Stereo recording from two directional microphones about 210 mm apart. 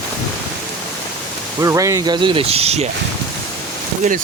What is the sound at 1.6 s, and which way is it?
Speech, 15° right (ahead or behind).